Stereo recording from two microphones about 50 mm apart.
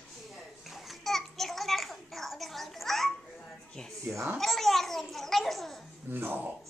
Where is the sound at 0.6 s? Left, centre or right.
Centre.